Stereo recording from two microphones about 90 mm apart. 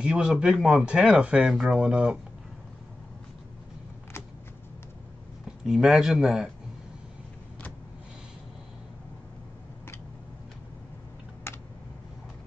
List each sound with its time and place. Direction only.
0.0 s speech: 10° right (ahead or behind)
5.7 s speech: 5° right (ahead or behind)
11.5 s computer keyboard: 25° left (ahead or behind)